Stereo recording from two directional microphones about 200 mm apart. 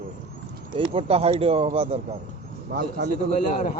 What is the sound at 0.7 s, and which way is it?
Speech, 25° right (ahead or behind).